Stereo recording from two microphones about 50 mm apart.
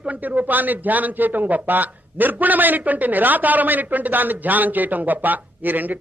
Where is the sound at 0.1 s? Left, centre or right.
Right.